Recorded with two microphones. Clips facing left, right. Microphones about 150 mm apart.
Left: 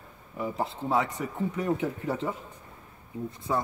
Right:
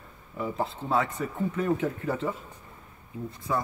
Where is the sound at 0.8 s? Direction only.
15° left (ahead or behind).